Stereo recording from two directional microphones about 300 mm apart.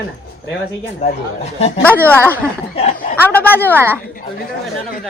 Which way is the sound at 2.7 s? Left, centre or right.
Left.